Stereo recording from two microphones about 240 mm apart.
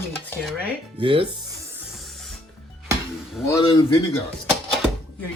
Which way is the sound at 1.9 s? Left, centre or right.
Centre.